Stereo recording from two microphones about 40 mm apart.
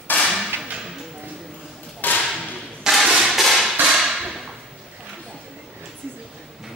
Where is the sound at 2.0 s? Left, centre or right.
Left.